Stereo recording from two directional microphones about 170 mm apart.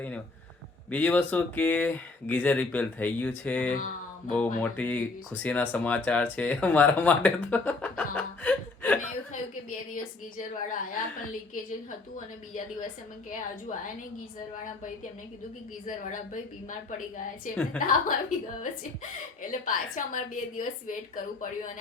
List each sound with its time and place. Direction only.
0.9 s speech: 10° left (ahead or behind)
9.6 s a woman's voice: 55° left (ahead or behind)
15.9 s a woman's voice: 50° left (ahead or behind)
17.7 s a woman's voice: 50° left (ahead or behind)